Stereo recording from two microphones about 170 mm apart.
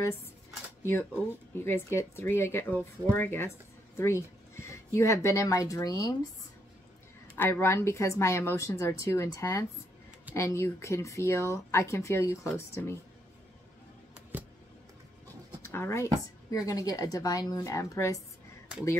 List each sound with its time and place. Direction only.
1.5 s speech: 15° left (ahead or behind)
7.3 s speech: 10° left (ahead or behind)
14.3 s a sound: 10° right (ahead or behind)
15.7 s speech: 15° left (ahead or behind)